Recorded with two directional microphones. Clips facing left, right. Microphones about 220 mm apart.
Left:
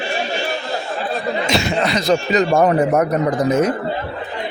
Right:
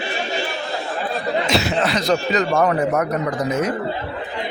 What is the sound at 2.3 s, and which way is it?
Speech, 25° left (ahead or behind).